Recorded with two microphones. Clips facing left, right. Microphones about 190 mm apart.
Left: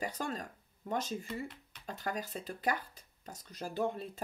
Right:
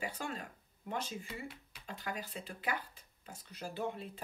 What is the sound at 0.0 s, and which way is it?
Speech, 40° left (ahead or behind).